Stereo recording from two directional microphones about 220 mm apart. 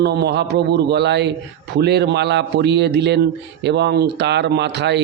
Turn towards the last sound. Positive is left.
turn(degrees=-50)  # may be behind; listen again after turning